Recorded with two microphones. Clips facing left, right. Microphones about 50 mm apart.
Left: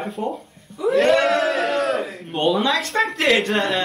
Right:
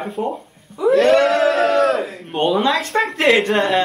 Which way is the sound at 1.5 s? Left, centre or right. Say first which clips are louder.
Right 5 dB; right.